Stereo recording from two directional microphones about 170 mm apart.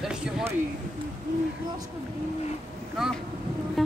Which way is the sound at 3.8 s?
Centre (ahead or behind).